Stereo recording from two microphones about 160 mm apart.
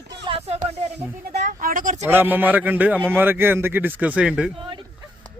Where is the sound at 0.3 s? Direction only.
40° right (ahead or behind).